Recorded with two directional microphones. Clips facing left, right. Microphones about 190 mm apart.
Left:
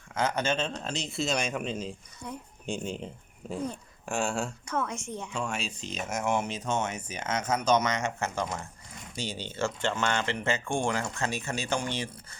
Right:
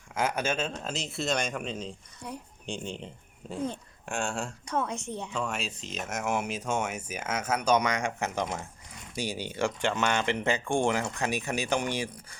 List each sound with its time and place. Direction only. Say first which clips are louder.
0.1 s speech: left 1 dB; 10° right (ahead or behind)
2.2 s speech: even; 15° right (ahead or behind)
2.6 s speech: left 3 dB; 5° left (ahead or behind)
4.7 s speech: right 3 dB; 15° right (ahead or behind)
5.3 s speech: even; centre (ahead or behind)